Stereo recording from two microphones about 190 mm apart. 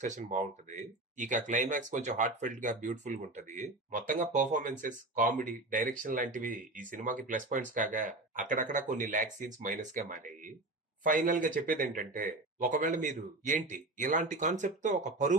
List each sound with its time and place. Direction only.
0.0 s speech: 40° right (ahead or behind)